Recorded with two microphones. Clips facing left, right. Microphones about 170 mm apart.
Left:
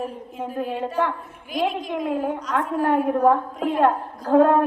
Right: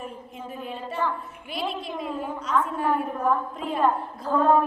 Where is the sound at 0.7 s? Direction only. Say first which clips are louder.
Left 3 dB; 80° left.